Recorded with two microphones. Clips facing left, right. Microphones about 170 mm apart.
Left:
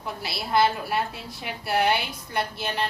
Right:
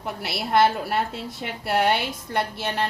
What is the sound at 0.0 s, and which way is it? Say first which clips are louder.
A woman's voice: right 3 dB; 65° right (ahead or behind).